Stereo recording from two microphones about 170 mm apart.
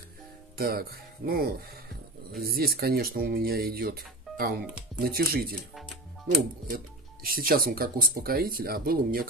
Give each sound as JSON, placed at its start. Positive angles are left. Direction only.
{"t": 0.6, "sound": "speech", "side_deg": -65}
{"t": 7.2, "sound": "speech", "side_deg": -60}